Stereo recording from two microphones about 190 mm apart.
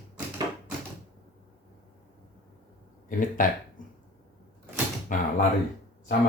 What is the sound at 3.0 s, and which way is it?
Speech, 45° left (ahead or behind).